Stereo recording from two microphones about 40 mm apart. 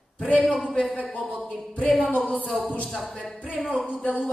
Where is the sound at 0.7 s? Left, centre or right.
Left.